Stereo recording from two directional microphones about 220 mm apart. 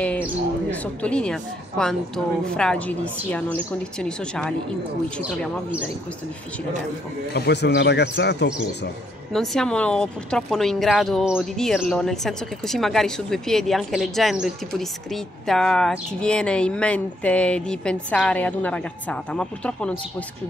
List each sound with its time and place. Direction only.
0.7 s speech: 5° left (ahead or behind)
7.3 s speech: 50° left (ahead or behind)
9.3 s speech: centre (ahead or behind)